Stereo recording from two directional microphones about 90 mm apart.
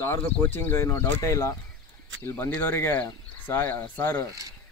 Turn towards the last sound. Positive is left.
turn(degrees=20)  # may be behind; listen again after turning